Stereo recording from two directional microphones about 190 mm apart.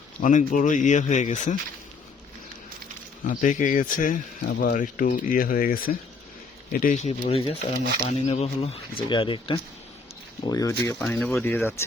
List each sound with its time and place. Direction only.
0.2 s speech: 40° left (ahead or behind)
3.2 s speech: 40° left (ahead or behind); by 11.9 s 10° left (ahead or behind)